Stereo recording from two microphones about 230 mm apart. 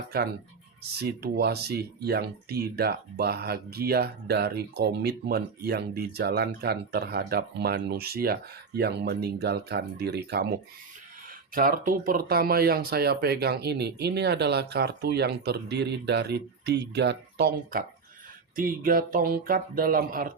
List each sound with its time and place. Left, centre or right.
0.1 s speech: right